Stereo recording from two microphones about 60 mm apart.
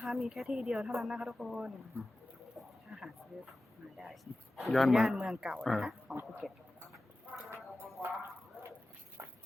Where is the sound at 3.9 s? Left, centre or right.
Centre.